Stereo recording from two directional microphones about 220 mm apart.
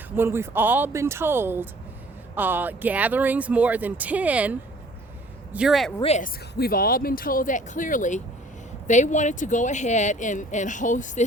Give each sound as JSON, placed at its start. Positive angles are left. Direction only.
{"t": 0.2, "sound": "speech", "side_deg": -10}
{"t": 5.5, "sound": "speech", "side_deg": 0}
{"t": 6.0, "sound": "speech", "side_deg": 30}